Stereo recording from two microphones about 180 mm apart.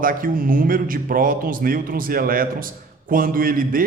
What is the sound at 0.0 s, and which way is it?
A man's voice, 50° right (ahead or behind).